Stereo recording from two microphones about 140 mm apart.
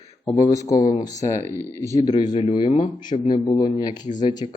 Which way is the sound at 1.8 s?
20° left (ahead or behind).